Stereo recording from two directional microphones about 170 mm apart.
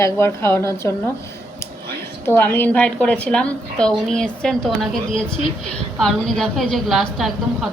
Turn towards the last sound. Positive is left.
turn(degrees=0)  # may be behind; listen again after turning